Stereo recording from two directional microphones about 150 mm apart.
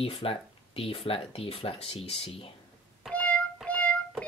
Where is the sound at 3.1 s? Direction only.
10° left (ahead or behind).